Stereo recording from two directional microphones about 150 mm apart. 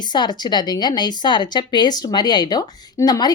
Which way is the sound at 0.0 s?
30° left (ahead or behind).